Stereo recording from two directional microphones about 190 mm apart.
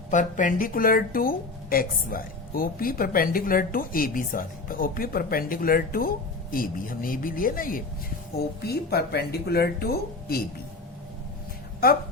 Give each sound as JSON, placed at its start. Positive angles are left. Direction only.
{"t": 0.1, "sound": "speech", "side_deg": 40}